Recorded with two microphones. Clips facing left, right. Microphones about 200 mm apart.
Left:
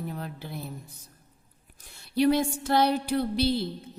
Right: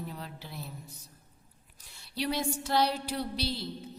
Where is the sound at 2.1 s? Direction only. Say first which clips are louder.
Left 9 dB; 50° left (ahead or behind).